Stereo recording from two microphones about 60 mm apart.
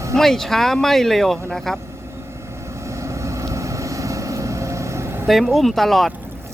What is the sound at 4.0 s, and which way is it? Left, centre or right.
Vehicle, right.